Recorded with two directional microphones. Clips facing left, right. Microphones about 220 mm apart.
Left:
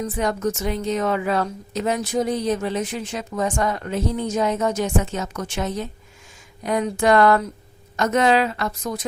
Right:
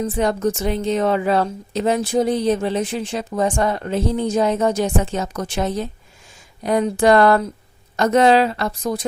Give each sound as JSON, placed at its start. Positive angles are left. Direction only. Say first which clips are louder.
{"t": 0.0, "sound": "a woman's voice", "louder": "right 4 dB", "side_deg": -30}